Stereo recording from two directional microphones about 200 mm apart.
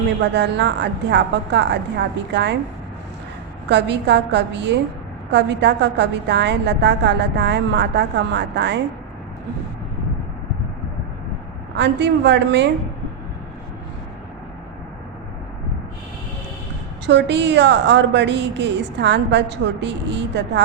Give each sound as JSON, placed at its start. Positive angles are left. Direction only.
{"t": 0.2, "sound": "a woman's voice", "side_deg": -60}
{"t": 3.7, "sound": "a woman's voice", "side_deg": -60}
{"t": 11.8, "sound": "a woman's voice", "side_deg": -60}
{"t": 17.1, "sound": "a woman's voice", "side_deg": -60}